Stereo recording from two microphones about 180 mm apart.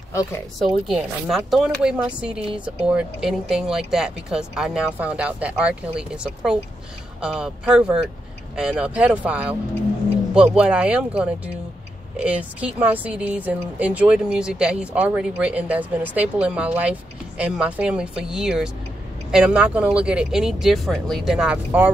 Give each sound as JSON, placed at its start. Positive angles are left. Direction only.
{"t": 0.1, "sound": "speech", "side_deg": 15}
{"t": 0.8, "sound": "speech", "side_deg": 0}